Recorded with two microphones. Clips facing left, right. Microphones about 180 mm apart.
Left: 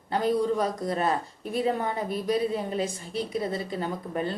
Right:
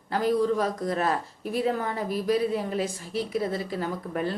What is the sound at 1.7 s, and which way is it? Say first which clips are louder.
Speech: left 1 dB; 25° left (ahead or behind).